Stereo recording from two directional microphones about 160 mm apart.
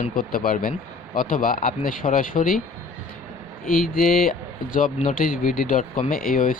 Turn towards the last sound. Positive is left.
turn(degrees=60)  # may be behind; listen again after turning